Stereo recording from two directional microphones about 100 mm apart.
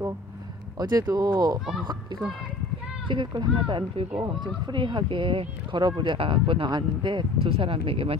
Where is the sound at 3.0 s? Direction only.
50° right (ahead or behind).